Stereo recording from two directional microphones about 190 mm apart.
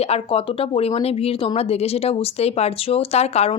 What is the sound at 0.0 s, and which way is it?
Speech, 30° left (ahead or behind).